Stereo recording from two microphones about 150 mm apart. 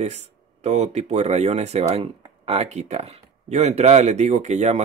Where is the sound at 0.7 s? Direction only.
50° right (ahead or behind).